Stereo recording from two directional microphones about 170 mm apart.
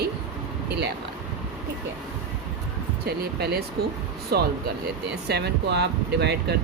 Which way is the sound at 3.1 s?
75° right (ahead or behind).